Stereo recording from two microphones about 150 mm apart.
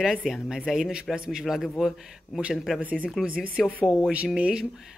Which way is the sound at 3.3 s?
70° right (ahead or behind).